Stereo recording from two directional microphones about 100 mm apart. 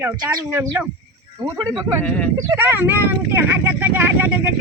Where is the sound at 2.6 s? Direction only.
20° right (ahead or behind).